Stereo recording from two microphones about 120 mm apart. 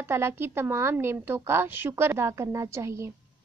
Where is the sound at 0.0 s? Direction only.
20° right (ahead or behind).